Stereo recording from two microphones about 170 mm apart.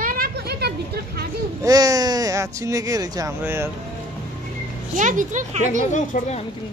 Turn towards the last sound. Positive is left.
turn(degrees=45)  # may be behind; listen again after turning